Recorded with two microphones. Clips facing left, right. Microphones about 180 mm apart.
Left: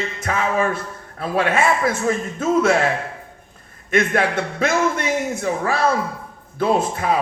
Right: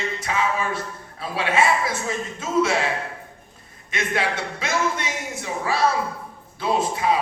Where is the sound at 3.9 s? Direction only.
50° left (ahead or behind).